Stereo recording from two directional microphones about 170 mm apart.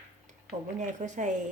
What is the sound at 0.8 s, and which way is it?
Speech, 45° right (ahead or behind).